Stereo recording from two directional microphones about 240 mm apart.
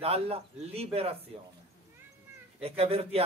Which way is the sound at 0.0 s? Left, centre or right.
Right.